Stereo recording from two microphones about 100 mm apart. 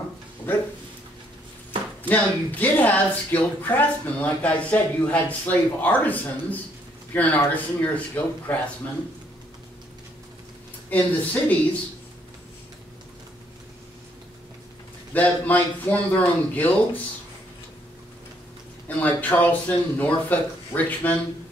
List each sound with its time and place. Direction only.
0.5 s speech: 20° left (ahead or behind)
2.0 s a woman's voice: 15° left (ahead or behind)
10.9 s a woman's voice: 15° left (ahead or behind)
15.1 s a woman's voice: 15° left (ahead or behind)
18.9 s a woman's voice: 15° left (ahead or behind)